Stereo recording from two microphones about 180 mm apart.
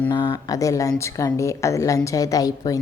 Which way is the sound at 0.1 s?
25° left (ahead or behind).